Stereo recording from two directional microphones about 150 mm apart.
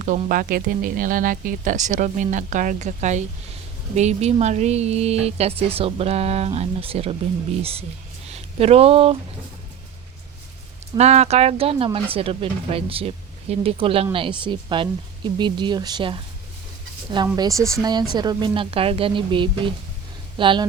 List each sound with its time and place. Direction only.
0.3 s speech: 75° right (ahead or behind); by 9.1 s 40° right (ahead or behind)
10.9 s speech: 45° right (ahead or behind)
17.3 s speech: 25° right (ahead or behind)